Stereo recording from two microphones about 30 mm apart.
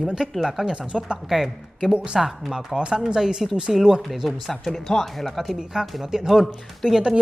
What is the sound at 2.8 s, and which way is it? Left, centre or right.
Speech, right.